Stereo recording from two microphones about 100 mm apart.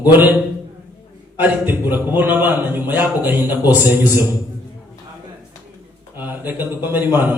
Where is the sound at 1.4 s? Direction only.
20° right (ahead or behind).